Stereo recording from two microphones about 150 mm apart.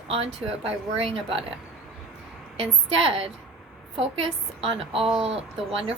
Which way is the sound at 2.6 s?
40° right (ahead or behind).